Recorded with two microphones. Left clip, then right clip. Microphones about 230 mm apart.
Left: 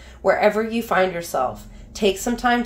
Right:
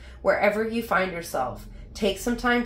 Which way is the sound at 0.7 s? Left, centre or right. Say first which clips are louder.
Left 5 dB; left.